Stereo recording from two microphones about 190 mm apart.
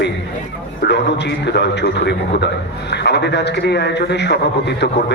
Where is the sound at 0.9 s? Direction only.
65° left (ahead or behind).